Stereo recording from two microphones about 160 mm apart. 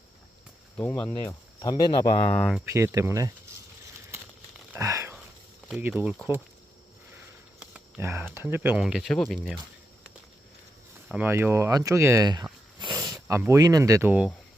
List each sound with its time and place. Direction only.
0.8 s speech: 10° left (ahead or behind); by 2.1 s 25° left (ahead or behind)
2.2 s speech: 5° left (ahead or behind)
2.6 s speech: 15° right (ahead or behind)
4.7 s a sound: 20° right (ahead or behind)
5.8 s speech: 10° right (ahead or behind)
7.6 s a sound: 5° right (ahead or behind)
8.0 s speech: 15° right (ahead or behind)
8.8 s speech: centre (ahead or behind)
11.1 s speech: 10° right (ahead or behind)
13.1 s a sound: 20° right (ahead or behind)
13.5 s speech: 20° right (ahead or behind)